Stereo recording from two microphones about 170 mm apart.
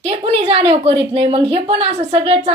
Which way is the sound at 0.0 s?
35° right (ahead or behind).